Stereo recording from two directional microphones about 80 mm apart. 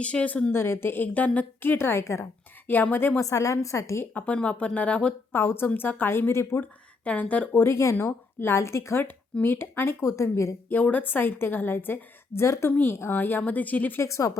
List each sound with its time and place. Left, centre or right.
0.0 s speech: centre
0.5 s a woman's voice: left
2.6 s a woman's voice: left
3.2 s speech: left
4.0 s speech: centre
5.3 s a woman's voice: left
7.0 s speech: centre
7.6 s a woman's voice: left
10.7 s a woman's voice: left
14.0 s speech: left